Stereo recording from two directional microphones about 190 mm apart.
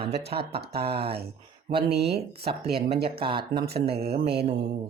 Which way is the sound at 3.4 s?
55° right (ahead or behind).